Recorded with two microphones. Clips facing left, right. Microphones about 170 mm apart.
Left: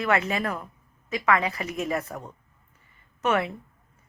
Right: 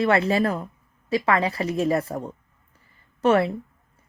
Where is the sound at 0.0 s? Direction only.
30° right (ahead or behind).